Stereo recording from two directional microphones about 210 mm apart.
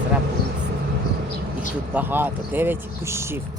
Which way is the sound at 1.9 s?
10° right (ahead or behind).